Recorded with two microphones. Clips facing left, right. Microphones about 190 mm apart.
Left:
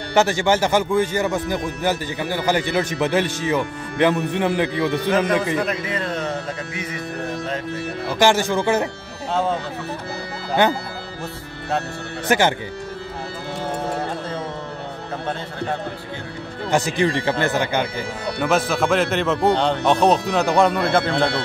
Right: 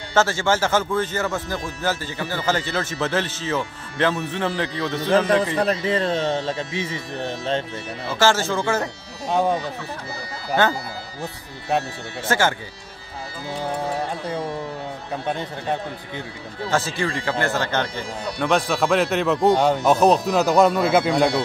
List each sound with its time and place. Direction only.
0.1 s speech: 15° left (ahead or behind)
5.1 s a man's voice: 30° right (ahead or behind)
8.1 s speech: 15° left (ahead or behind)
9.3 s speech: 15° right (ahead or behind)
10.6 s speech: 15° left (ahead or behind)
12.3 s speech: 20° left (ahead or behind)
16.7 s speech: 15° left (ahead or behind)
18.4 s speech: 5° left (ahead or behind)